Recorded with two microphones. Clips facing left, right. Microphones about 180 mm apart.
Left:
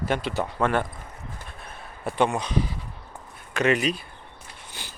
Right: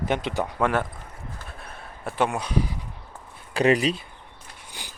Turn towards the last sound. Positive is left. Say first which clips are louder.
# even
turn(degrees=-15)  # may be behind; listen again after turning